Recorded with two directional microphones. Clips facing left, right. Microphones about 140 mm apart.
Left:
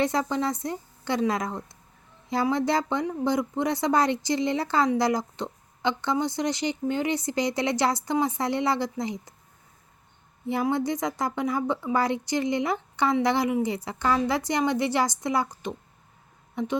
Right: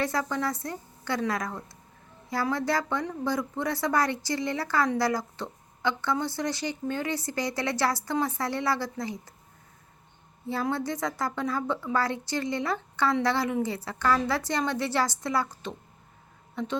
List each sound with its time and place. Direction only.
0.0 s speech: 20° left (ahead or behind)
10.4 s a woman's voice: 15° left (ahead or behind)